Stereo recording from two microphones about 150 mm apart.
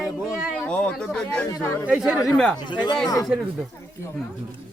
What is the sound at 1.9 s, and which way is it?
Speech, 10° right (ahead or behind).